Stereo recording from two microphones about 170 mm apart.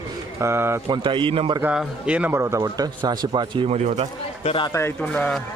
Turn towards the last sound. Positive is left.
turn(degrees=10)  # may be behind; listen again after turning